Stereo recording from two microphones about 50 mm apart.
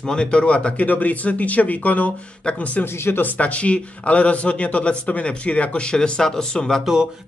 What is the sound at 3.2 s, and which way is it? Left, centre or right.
A man's voice, left.